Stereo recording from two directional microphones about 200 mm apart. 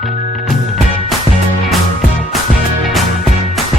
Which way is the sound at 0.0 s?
Centre (ahead or behind).